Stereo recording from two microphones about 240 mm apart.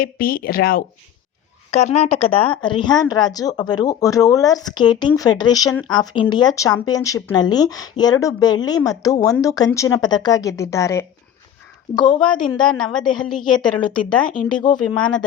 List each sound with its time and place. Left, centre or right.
0.0 s speech: left
1.7 s a woman's voice: left
12.2 s a woman's voice: centre
13.7 s speech: centre